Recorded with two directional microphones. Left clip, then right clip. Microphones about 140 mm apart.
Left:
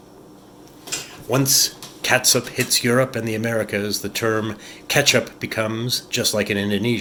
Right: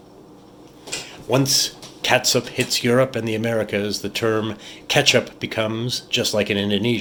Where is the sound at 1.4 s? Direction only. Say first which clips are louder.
Left 5 dB; 50° right (ahead or behind).